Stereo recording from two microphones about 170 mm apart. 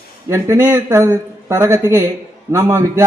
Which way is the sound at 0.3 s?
15° right (ahead or behind).